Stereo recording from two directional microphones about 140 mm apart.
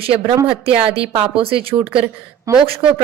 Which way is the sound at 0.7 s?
45° right (ahead or behind).